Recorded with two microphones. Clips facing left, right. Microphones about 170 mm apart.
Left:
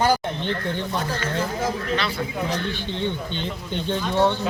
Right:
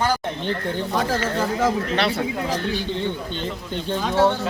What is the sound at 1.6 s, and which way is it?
Speech, 70° right (ahead or behind).